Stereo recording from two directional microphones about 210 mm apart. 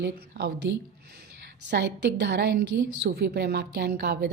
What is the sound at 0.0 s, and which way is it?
Speech, 50° right (ahead or behind).